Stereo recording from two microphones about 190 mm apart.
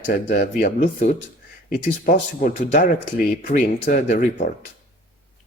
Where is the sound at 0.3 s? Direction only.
50° left (ahead or behind).